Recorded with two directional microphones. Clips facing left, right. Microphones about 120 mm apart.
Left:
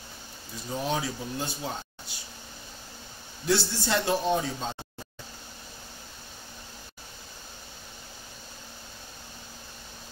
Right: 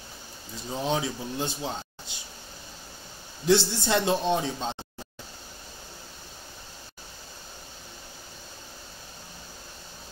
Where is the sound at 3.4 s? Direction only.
20° right (ahead or behind).